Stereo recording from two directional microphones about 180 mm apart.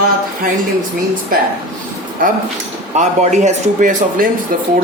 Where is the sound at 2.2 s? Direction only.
50° right (ahead or behind).